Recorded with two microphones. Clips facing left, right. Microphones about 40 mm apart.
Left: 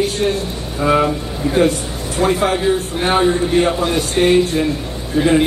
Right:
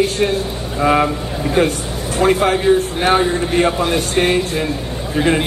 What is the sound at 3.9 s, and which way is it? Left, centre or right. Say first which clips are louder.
Speech: left 2 dB; right.